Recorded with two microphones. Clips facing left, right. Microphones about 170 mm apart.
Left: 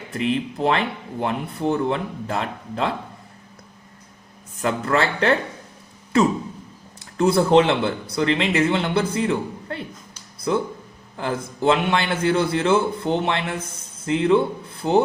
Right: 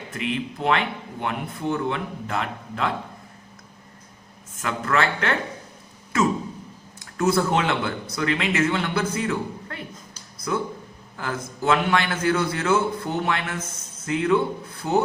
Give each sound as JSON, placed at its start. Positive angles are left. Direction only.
{"t": 0.1, "sound": "speech", "side_deg": 35}
{"t": 4.6, "sound": "speech", "side_deg": 35}
{"t": 7.2, "sound": "a man's voice", "side_deg": 30}